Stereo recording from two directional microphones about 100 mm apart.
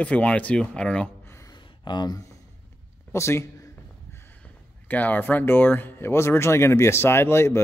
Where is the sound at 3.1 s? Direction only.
25° left (ahead or behind).